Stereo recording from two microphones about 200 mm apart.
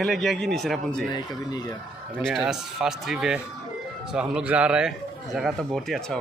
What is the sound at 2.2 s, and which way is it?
A man's voice, centre (ahead or behind).